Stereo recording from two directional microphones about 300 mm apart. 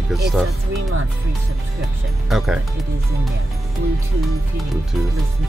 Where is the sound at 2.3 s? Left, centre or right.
Centre.